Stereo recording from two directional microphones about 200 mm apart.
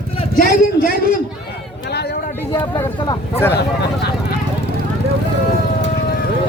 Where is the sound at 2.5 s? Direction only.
25° left (ahead or behind).